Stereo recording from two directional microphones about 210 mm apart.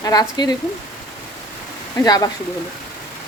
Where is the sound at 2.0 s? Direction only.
20° left (ahead or behind).